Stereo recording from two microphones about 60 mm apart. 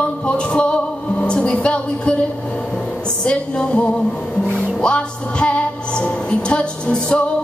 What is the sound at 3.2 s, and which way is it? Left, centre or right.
Music, centre.